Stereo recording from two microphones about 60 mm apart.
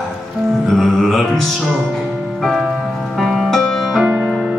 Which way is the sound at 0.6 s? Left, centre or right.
Centre.